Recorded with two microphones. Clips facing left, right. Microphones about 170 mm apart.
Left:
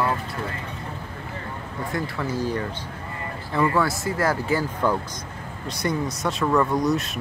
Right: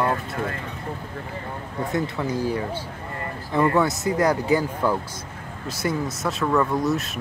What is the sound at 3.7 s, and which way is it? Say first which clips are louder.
Speech: right 2 dB; 20° right (ahead or behind).